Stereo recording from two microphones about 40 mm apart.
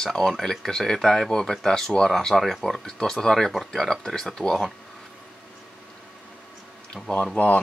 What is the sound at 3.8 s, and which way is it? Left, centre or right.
Speech, centre.